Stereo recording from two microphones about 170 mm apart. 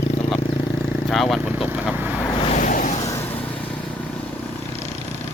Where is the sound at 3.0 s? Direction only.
15° left (ahead or behind).